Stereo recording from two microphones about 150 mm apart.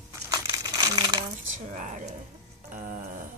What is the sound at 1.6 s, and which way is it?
A woman's voice, 55° right (ahead or behind).